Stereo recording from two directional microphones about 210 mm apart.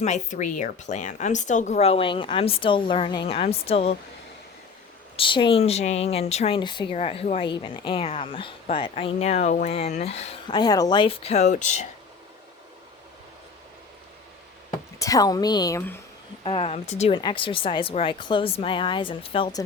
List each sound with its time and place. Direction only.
0.0 s speech: 35° left (ahead or behind)
5.1 s speech: 25° left (ahead or behind)
14.9 s a woman's voice: 15° left (ahead or behind)
16.4 s speech: 25° left (ahead or behind)